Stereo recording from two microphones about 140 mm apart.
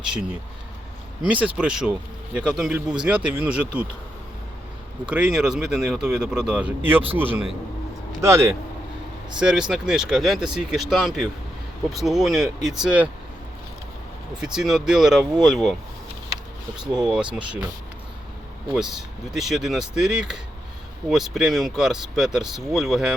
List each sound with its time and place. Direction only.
0.0 s speech: 5° right (ahead or behind)
1.5 s speech: 5° right (ahead or behind)
5.0 s speech: 10° right (ahead or behind)
9.4 s speech: 5° right (ahead or behind)
14.4 s speech: 5° right (ahead or behind)
17.0 s speech: 5° right (ahead or behind)
19.3 s speech: centre (ahead or behind)